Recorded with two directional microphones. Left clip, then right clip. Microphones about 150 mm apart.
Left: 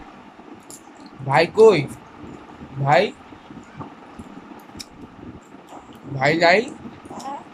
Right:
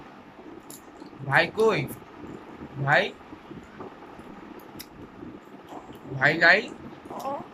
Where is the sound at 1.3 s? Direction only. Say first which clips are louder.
Left 8 dB; 30° left (ahead or behind).